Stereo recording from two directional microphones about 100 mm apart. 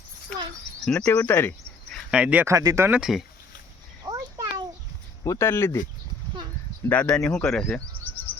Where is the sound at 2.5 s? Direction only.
35° right (ahead or behind).